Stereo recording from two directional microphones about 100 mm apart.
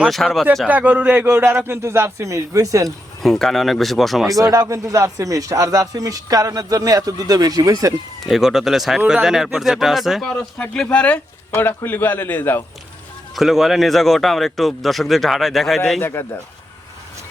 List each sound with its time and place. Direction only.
0.1 s speech: centre (ahead or behind)
0.7 s a man's voice: 15° right (ahead or behind); by 2.9 s 35° right (ahead or behind)
3.2 s speech: 5° left (ahead or behind)
4.4 s speech: 35° right (ahead or behind)
8.3 s speech: 5° right (ahead or behind)
10.6 s speech: 10° left (ahead or behind)
13.3 s speech: centre (ahead or behind)
16.0 s speech: 25° left (ahead or behind)